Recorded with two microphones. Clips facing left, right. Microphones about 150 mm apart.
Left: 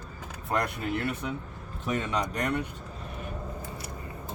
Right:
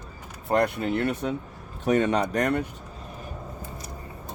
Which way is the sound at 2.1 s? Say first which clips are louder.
Right 6 dB; 45° right (ahead or behind).